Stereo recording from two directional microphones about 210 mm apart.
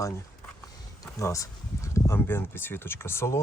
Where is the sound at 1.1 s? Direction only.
15° left (ahead or behind).